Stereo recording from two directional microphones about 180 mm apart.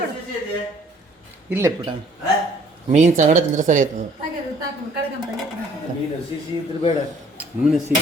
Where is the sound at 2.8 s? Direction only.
40° right (ahead or behind).